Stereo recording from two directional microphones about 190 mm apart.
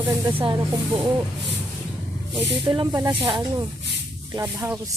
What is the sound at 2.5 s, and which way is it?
Speech, 25° right (ahead or behind).